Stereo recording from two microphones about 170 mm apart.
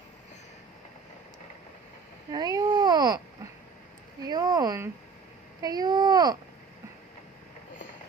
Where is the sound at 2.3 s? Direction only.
20° right (ahead or behind).